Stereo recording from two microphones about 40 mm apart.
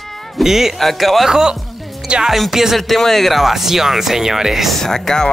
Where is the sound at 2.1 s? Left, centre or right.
Right.